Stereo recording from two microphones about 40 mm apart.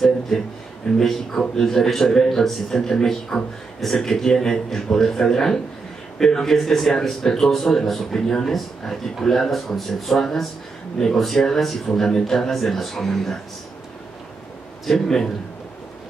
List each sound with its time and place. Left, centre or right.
0.9 s a man's voice: centre
1.3 s a man's voice: centre
14.9 s a man's voice: centre